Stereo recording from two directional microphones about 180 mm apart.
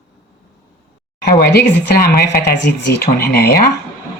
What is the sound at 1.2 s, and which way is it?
Speech, 60° left (ahead or behind).